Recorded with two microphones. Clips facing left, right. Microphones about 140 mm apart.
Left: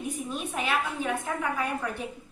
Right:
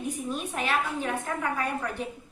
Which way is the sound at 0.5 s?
10° left (ahead or behind).